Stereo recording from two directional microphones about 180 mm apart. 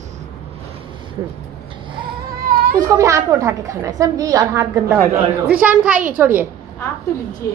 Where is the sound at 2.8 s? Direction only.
20° right (ahead or behind).